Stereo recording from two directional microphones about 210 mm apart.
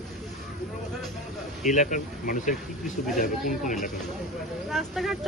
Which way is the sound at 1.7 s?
35° left (ahead or behind).